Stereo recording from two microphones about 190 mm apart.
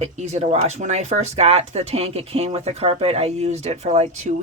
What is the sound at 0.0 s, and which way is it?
Speech, 35° right (ahead or behind).